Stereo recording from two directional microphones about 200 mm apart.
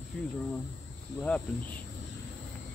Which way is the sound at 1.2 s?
5° left (ahead or behind).